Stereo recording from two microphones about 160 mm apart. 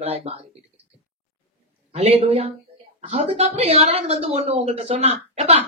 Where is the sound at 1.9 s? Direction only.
40° right (ahead or behind).